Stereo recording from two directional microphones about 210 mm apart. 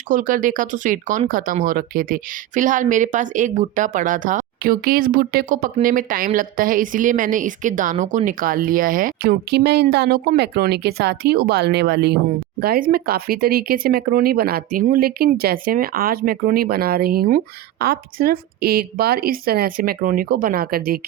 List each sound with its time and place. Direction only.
0.1 s a woman's voice: 40° right (ahead or behind)